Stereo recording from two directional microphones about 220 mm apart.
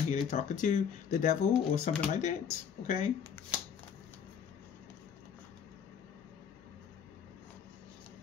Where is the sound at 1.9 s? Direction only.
30° left (ahead or behind).